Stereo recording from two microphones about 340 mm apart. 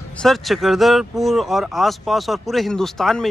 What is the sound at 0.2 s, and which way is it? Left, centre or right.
Speech, centre.